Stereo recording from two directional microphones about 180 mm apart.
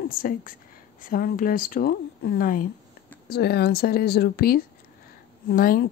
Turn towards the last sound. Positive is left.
turn(degrees=55)  # may be behind; listen again after turning